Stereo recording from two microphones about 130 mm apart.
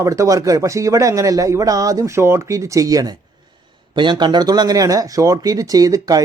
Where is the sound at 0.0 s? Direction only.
25° right (ahead or behind).